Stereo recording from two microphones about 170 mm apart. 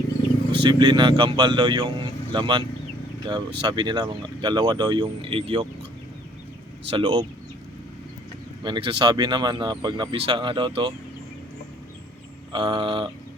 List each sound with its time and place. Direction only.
0.5 s speech: 30° right (ahead or behind)
6.9 s speech: 30° right (ahead or behind)
8.6 s speech: 30° right (ahead or behind)
12.5 s speech: 30° right (ahead or behind)